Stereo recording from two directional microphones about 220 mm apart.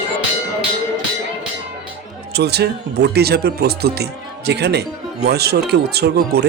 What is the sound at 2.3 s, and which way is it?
Speech, 50° right (ahead or behind).